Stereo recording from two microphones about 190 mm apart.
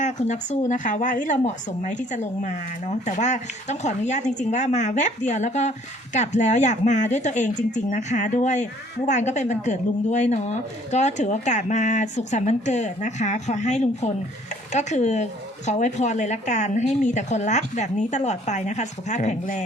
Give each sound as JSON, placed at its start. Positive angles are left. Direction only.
{"t": 0.0, "sound": "speech", "side_deg": 40}